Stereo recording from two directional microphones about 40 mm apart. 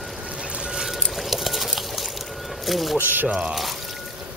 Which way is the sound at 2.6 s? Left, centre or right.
Centre.